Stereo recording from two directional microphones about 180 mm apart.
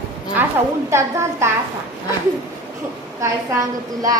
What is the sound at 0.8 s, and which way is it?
Speech, 15° right (ahead or behind).